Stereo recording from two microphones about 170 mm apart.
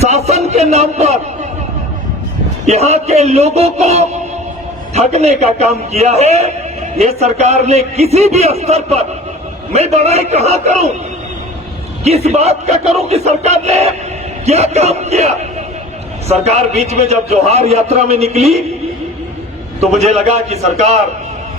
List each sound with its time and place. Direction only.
0.0 s a sound: 40° right (ahead or behind)
2.6 s a man's voice: 40° right (ahead or behind)
12.0 s a man's voice: 40° right (ahead or behind)
19.8 s a man's voice: 40° right (ahead or behind)